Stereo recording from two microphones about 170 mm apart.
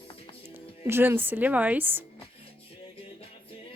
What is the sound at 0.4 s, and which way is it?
Speech, 15° right (ahead or behind).